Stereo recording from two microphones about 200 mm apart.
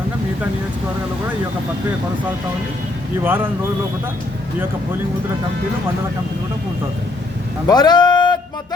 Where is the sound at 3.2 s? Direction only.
10° right (ahead or behind).